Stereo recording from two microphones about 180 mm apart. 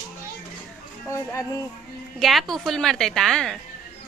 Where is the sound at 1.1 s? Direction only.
15° left (ahead or behind).